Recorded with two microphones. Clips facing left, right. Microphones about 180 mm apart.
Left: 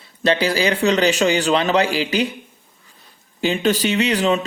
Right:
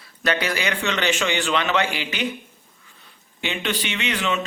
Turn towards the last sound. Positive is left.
turn(degrees=35)  # may be behind; listen again after turning